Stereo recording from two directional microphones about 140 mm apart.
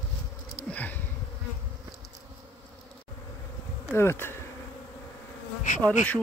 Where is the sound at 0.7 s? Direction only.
10° left (ahead or behind).